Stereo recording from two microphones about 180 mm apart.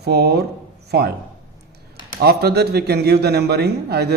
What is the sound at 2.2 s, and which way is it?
Speech, 60° right (ahead or behind).